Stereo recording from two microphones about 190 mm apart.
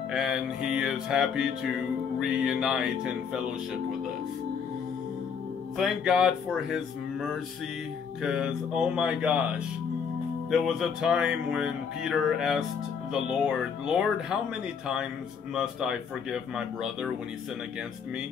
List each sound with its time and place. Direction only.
0.1 s speech: 5° right (ahead or behind)
5.8 s speech: 5° right (ahead or behind)
10.5 s speech: centre (ahead or behind)
15.5 s speech: 5° right (ahead or behind)